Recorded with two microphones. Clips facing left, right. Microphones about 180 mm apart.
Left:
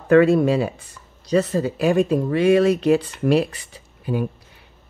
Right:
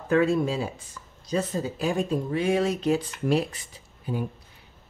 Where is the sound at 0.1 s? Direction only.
70° left (ahead or behind).